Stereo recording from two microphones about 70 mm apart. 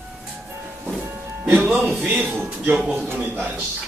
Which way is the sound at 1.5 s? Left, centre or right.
Right.